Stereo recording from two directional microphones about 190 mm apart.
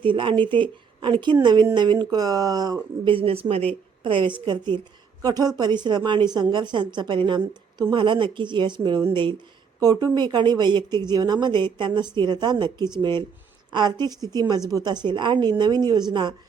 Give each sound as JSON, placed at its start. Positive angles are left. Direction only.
{"t": 0.0, "sound": "speech", "side_deg": -25}